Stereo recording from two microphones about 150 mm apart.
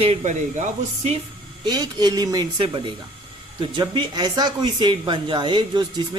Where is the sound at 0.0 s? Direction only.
45° right (ahead or behind).